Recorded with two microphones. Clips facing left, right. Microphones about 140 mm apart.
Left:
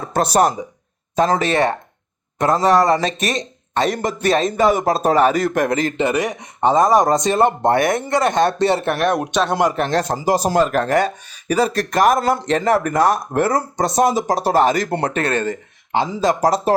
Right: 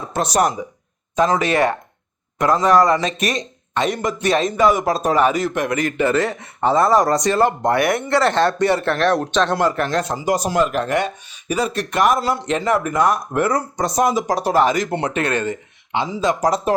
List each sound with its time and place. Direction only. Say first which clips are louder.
0.0 s a sound: left 3 dB; 50° left (ahead or behind)
1.1 s speech: even; 35° left (ahead or behind)
6.0 s speech: right 1 dB; 15° left (ahead or behind)
10.0 s speech: left 2 dB; 40° left (ahead or behind)